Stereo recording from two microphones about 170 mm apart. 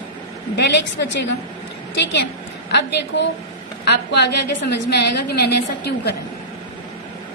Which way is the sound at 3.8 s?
75° left (ahead or behind).